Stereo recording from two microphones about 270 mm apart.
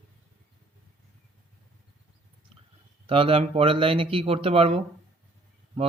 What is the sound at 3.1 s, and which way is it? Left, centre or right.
Speech, right.